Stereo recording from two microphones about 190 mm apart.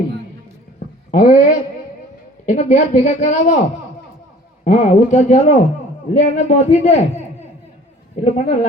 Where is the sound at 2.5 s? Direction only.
35° left (ahead or behind).